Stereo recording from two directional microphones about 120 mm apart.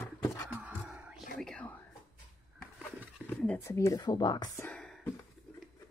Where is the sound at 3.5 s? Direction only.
25° left (ahead or behind).